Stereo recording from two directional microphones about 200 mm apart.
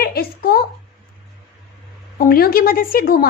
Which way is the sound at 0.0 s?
50° left (ahead or behind).